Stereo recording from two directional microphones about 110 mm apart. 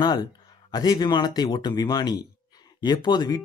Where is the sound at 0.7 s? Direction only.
40° left (ahead or behind).